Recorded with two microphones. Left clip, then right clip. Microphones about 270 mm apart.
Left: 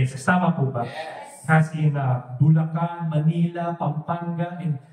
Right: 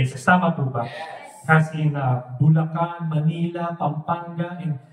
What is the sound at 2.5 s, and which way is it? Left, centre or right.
Speech, right.